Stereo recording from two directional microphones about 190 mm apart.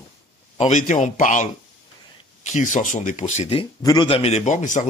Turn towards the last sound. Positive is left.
turn(degrees=40)  # may be behind; listen again after turning